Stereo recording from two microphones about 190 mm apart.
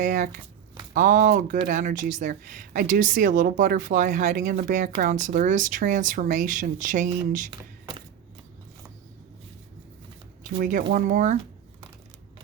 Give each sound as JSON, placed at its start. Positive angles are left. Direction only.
{"t": 0.0, "sound": "speech", "side_deg": -45}
{"t": 7.5, "sound": "a sound", "side_deg": -25}
{"t": 10.6, "sound": "speech", "side_deg": -45}